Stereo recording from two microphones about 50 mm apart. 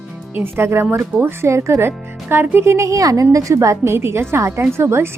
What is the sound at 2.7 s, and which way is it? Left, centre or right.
A woman's voice, right.